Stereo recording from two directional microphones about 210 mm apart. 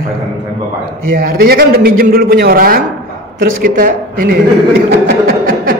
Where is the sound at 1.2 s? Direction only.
45° right (ahead or behind).